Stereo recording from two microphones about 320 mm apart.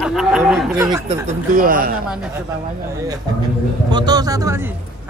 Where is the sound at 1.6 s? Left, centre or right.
Right.